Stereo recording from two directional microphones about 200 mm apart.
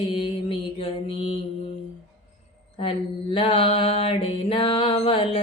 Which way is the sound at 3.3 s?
25° left (ahead or behind).